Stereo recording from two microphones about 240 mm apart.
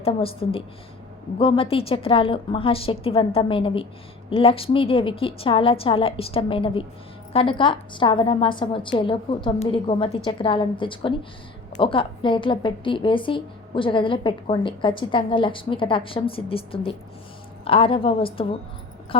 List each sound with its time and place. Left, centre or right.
0.0 s a woman's voice: left